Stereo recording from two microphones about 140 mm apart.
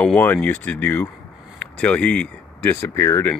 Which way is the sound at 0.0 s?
10° left (ahead or behind).